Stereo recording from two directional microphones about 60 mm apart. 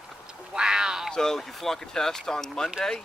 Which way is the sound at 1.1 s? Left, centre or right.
Centre.